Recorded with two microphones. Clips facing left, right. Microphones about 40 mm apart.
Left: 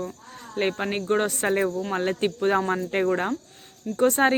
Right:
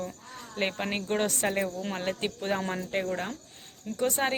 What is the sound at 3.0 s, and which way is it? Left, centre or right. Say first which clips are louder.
Cricket: left 9 dB; left.